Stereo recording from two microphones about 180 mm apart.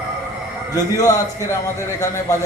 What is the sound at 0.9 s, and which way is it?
A man's voice, 20° left (ahead or behind).